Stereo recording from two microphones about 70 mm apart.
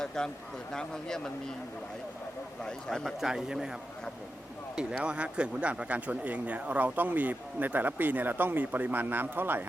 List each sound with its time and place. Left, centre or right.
0.2 s a man's voice: centre
2.6 s a man's voice: centre
3.2 s a man's voice: centre
4.8 s speech: centre; by 9.6 s right